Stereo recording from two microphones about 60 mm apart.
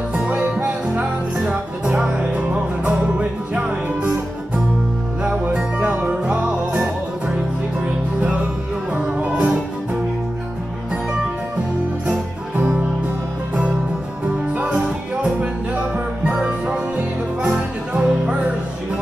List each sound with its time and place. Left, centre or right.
0.6 s music: right
5.2 s music: centre
8.2 s music: right
14.6 s music: right
16.3 s music: centre
16.9 s music: right